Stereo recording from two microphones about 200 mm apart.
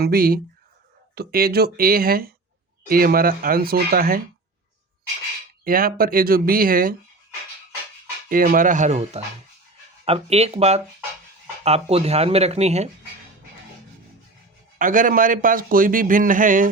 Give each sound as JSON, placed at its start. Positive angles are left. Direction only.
{"t": 0.0, "sound": "a man's voice", "side_deg": -45}
{"t": 5.6, "sound": "a man's voice", "side_deg": -45}
{"t": 8.3, "sound": "speech", "side_deg": -45}
{"t": 14.8, "sound": "a man's voice", "side_deg": -40}